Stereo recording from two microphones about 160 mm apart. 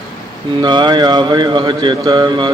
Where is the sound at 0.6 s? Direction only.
30° right (ahead or behind).